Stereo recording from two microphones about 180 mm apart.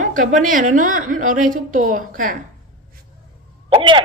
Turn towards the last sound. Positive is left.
turn(degrees=-30)  # may be behind; listen again after turning